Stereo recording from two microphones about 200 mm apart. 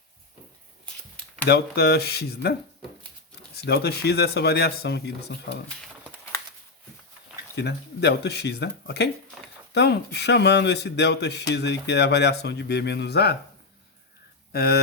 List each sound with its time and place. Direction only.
1.5 s speech: 55° left (ahead or behind)
7.5 s speech: 55° left (ahead or behind)
14.5 s speech: 50° left (ahead or behind)